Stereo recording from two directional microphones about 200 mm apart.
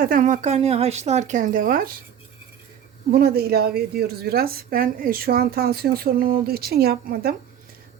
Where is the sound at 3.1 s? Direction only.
50° right (ahead or behind).